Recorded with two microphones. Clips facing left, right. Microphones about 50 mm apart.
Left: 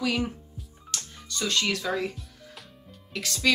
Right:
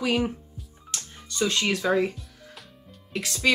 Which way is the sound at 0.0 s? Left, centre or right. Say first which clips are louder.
Right 3 dB; centre.